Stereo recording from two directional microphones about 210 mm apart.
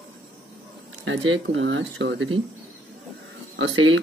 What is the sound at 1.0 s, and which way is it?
Speech, 65° right (ahead or behind).